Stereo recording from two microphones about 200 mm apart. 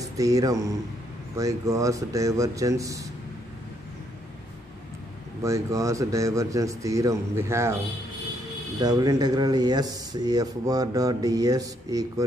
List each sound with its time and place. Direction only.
0.0 s speech: 15° right (ahead or behind)
5.4 s speech: 15° right (ahead or behind)
8.7 s speech: 20° right (ahead or behind)